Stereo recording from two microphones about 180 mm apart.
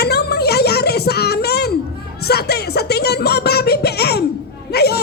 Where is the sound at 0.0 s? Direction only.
65° left (ahead or behind).